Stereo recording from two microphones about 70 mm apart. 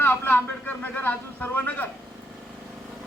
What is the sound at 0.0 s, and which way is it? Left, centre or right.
Speech, left.